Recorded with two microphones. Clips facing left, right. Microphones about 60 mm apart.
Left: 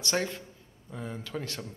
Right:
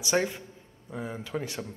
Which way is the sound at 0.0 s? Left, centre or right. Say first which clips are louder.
Right 3 dB; centre.